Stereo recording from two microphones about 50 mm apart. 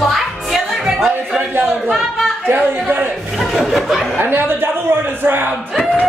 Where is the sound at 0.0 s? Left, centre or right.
Centre.